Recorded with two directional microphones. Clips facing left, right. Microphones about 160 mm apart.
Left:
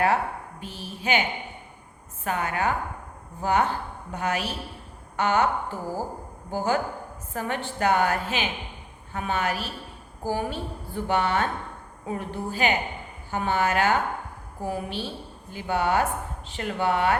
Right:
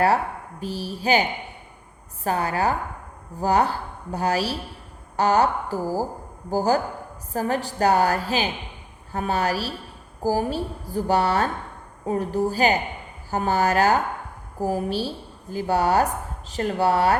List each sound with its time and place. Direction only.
0.6 s a woman's voice: 35° right (ahead or behind)
2.2 s a woman's voice: 35° right (ahead or behind)